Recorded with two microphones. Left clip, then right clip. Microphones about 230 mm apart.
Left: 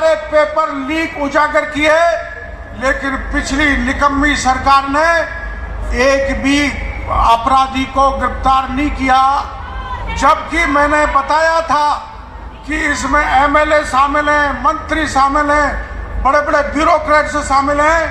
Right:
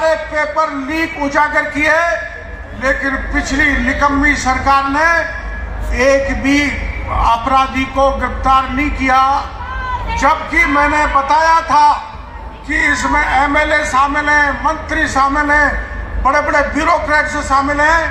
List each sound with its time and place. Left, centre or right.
0.0 s a sound: left
0.9 s a man's voice: left
16.8 s a man's voice: left